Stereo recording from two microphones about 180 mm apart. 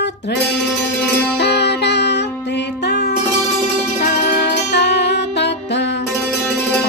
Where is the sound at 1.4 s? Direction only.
70° left (ahead or behind).